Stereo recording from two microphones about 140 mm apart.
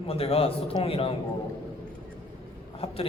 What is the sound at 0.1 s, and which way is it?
A man's voice, 45° left (ahead or behind).